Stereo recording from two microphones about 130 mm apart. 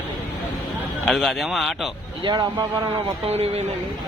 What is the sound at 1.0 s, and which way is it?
Speech, centre (ahead or behind).